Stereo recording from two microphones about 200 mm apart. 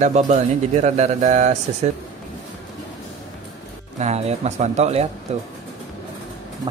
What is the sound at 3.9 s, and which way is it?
A man's voice, 35° right (ahead or behind).